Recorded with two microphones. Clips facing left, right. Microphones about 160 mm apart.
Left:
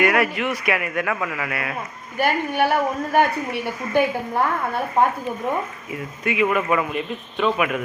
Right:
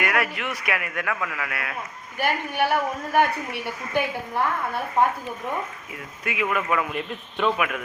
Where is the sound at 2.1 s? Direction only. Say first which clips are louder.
Left 4 dB; 50° left (ahead or behind).